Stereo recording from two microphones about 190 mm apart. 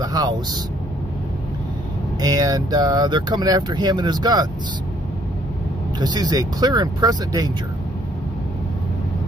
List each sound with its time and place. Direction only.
0.0 s speech: 20° right (ahead or behind)
2.1 s speech: 20° right (ahead or behind)
5.9 s speech: 20° right (ahead or behind)